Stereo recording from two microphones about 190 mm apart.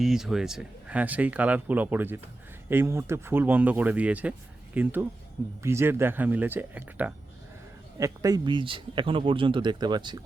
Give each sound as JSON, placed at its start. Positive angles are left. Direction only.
{"t": 0.0, "sound": "speech", "side_deg": 0}